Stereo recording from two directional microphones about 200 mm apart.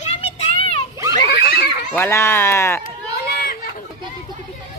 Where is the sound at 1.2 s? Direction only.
50° left (ahead or behind).